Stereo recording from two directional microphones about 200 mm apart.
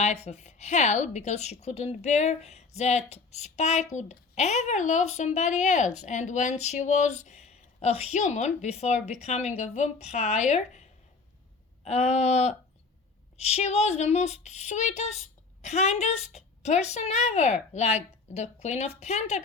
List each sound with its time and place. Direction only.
0.0 s a woman's voice: 35° left (ahead or behind)
11.8 s a woman's voice: 30° left (ahead or behind)